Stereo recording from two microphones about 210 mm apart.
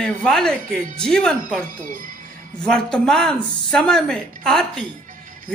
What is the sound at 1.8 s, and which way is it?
Speech, 40° right (ahead or behind).